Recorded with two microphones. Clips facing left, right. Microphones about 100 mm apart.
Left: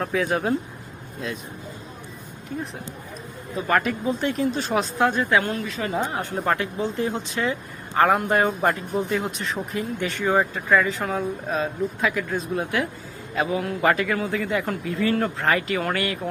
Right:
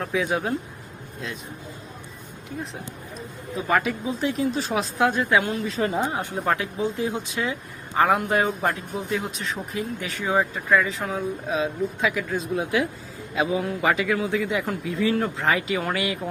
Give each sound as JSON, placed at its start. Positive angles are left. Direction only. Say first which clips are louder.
{"t": 0.0, "sound": "speech", "louder": "left 1 dB", "side_deg": 0}
{"t": 3.7, "sound": "speech", "louder": "left 1 dB", "side_deg": 0}
{"t": 5.3, "sound": "speech", "louder": "even", "side_deg": -10}
{"t": 5.6, "sound": "a woman's voice", "louder": "right 2 dB", "side_deg": -30}
{"t": 6.0, "sound": "speech", "louder": "right 1 dB", "side_deg": -15}
{"t": 6.3, "sound": "speech", "louder": "left 1 dB", "side_deg": 0}